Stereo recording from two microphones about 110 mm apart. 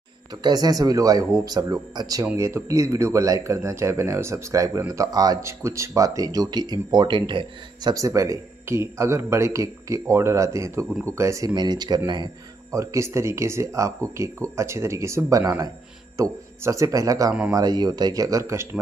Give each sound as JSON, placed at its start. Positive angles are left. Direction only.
{"t": 0.4, "sound": "speech", "side_deg": -35}
{"t": 7.9, "sound": "speech", "side_deg": -30}
{"t": 11.5, "sound": "speech", "side_deg": -40}
{"t": 12.7, "sound": "speech", "side_deg": -25}